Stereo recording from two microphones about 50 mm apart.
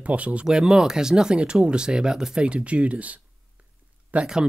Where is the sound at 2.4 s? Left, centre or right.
Right.